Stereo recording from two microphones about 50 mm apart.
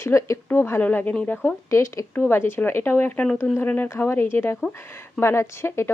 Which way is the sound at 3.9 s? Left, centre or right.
Left.